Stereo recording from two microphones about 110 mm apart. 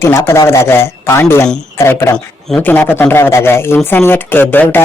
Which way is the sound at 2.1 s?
10° left (ahead or behind).